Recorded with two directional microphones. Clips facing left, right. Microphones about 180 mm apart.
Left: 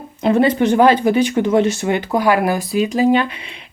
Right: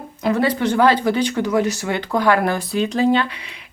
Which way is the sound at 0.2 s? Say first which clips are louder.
Left 4 dB; 25° left (ahead or behind).